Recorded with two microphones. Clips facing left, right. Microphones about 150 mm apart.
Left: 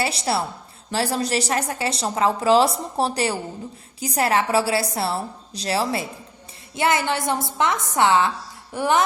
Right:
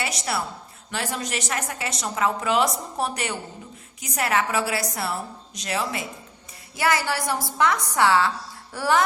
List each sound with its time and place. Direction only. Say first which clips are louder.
0.0 s a woman's voice: left 5 dB; 30° left (ahead or behind)